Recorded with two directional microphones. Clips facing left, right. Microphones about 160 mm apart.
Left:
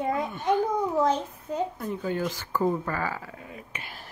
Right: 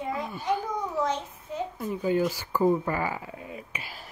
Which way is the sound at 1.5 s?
40° left (ahead or behind).